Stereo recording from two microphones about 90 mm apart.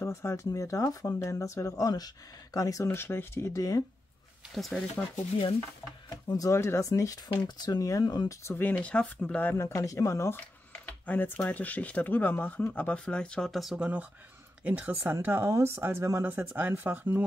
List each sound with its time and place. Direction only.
0.0 s speech: 30° left (ahead or behind)
3.5 s speech: 40° left (ahead or behind)
4.6 s speech: centre (ahead or behind)
6.2 s speech: 35° left (ahead or behind)
8.5 s speech: 25° left (ahead or behind)
8.7 s speech: 10° left (ahead or behind)
9.6 s speech: 35° left (ahead or behind); by 13.8 s centre (ahead or behind)
14.6 s speech: 20° right (ahead or behind)